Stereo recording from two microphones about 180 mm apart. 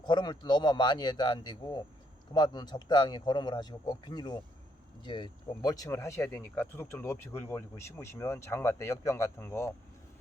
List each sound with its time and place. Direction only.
0.0 s speech: 25° left (ahead or behind)